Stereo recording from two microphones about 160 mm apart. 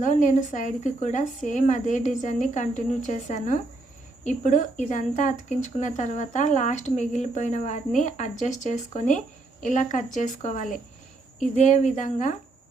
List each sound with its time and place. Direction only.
0.0 s speech: 50° left (ahead or behind)